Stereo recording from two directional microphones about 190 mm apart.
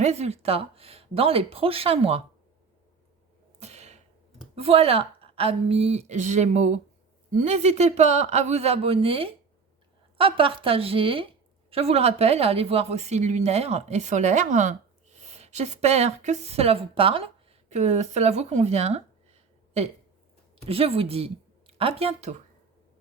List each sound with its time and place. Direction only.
0.0 s a woman's voice: 35° right (ahead or behind)
3.6 s a sound: 35° right (ahead or behind)
4.5 s a woman's voice: 30° right (ahead or behind)
20.7 s speech: 30° right (ahead or behind)